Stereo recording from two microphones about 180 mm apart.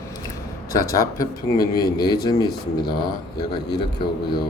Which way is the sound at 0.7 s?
20° left (ahead or behind).